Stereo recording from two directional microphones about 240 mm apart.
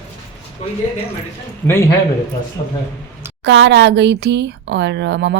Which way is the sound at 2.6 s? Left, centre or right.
Left.